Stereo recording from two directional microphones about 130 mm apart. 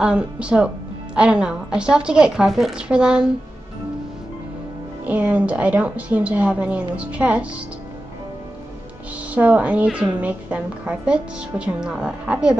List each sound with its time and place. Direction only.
0.0 s a woman's voice: 5° right (ahead or behind)
5.0 s a woman's voice: 10° right (ahead or behind)
9.3 s a woman's voice: 10° right (ahead or behind)